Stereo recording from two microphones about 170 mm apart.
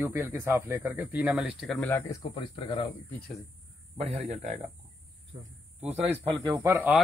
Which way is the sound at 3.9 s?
40° right (ahead or behind).